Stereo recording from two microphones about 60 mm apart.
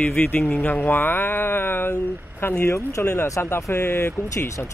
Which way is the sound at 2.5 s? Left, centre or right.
Left.